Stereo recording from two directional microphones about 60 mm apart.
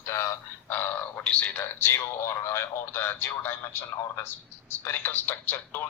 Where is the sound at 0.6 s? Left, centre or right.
Left.